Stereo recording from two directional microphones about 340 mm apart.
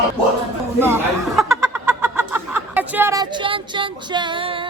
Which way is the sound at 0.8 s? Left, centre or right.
Centre.